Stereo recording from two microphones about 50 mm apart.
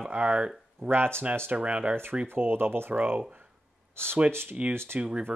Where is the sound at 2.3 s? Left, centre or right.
Right.